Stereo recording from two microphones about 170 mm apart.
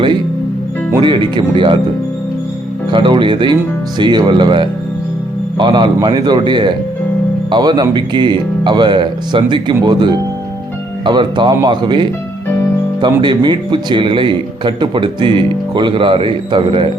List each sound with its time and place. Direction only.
1.0 s speech: 25° right (ahead or behind)
2.9 s speech: 30° right (ahead or behind)